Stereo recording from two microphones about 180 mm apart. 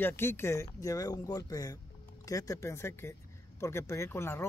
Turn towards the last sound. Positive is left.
turn(degrees=15)  # may be behind; listen again after turning